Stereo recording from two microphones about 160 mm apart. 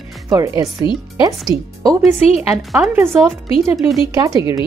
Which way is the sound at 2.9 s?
15° right (ahead or behind).